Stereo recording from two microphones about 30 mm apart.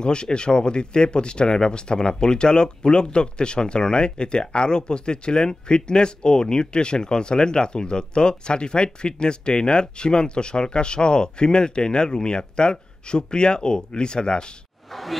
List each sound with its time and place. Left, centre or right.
0.0 s speech: left
14.9 s whoosh: centre